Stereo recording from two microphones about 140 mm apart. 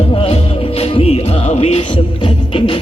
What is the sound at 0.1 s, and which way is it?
Music, 40° left (ahead or behind).